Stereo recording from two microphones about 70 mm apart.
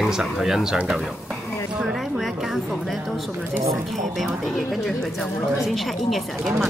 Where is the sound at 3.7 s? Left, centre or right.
Centre.